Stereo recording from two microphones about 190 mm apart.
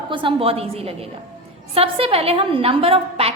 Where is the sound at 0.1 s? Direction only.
25° right (ahead or behind).